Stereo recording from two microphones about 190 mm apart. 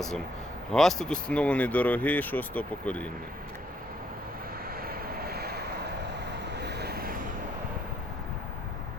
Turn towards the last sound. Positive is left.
turn(degrees=-50)  # may be behind; listen again after turning